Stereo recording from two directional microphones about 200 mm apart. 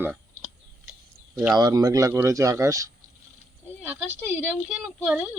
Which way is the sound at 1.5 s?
20° right (ahead or behind).